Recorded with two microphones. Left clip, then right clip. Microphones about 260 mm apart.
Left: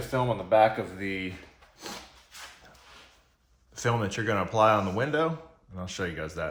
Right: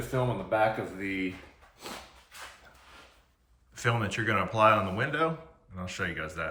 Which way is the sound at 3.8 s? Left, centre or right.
Centre.